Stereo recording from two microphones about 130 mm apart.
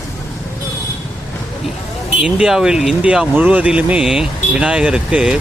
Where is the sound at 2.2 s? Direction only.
5° right (ahead or behind).